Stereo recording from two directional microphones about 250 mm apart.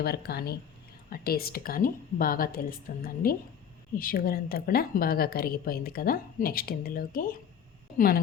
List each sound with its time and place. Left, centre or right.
0.0 s a woman's voice: left